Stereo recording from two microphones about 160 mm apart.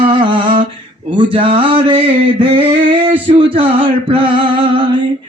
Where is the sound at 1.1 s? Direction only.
35° right (ahead or behind).